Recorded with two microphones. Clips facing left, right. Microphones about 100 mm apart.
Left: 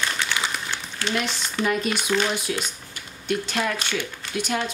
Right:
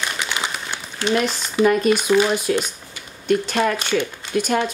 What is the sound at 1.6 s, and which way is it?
Speech, 45° right (ahead or behind).